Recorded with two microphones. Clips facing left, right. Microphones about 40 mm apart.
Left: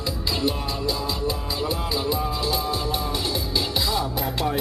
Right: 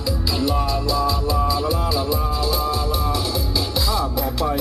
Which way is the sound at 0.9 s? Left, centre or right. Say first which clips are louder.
Right 4 dB; left.